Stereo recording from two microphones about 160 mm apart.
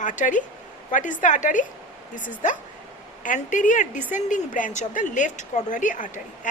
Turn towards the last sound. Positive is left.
turn(degrees=55)  # may be behind; listen again after turning